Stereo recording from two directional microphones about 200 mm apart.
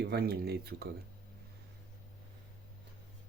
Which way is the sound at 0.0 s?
55° right (ahead or behind).